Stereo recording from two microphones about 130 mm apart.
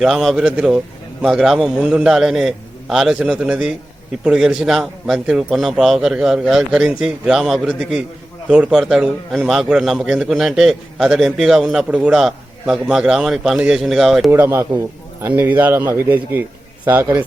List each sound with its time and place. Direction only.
0.0 s a man's voice: centre (ahead or behind)
14.3 s a man's voice: 20° right (ahead or behind)